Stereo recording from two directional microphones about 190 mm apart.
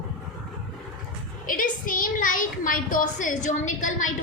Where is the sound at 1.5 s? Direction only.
45° left (ahead or behind).